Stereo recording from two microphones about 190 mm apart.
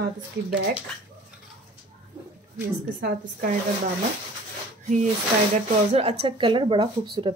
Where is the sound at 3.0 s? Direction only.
50° right (ahead or behind).